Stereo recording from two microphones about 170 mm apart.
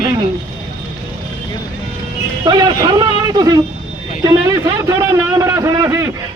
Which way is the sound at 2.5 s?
25° right (ahead or behind).